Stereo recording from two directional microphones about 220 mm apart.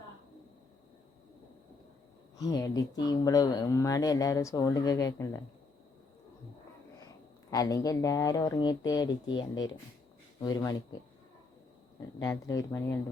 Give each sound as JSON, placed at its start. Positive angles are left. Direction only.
{"t": 2.4, "sound": "speech", "side_deg": 15}
{"t": 7.5, "sound": "speech", "side_deg": 15}
{"t": 12.2, "sound": "speech", "side_deg": 15}